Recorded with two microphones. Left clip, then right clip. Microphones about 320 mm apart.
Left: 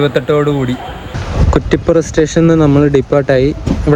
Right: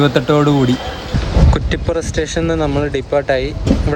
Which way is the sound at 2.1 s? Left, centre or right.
Centre.